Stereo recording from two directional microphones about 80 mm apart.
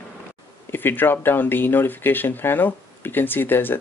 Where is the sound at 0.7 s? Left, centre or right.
Left.